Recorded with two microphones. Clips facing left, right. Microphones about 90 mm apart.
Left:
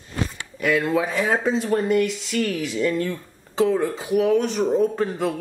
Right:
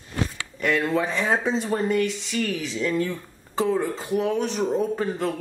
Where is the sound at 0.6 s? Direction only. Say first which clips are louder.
Left 2 dB; 5° left (ahead or behind).